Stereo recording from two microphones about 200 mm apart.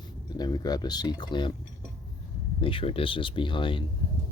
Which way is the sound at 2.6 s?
25° left (ahead or behind).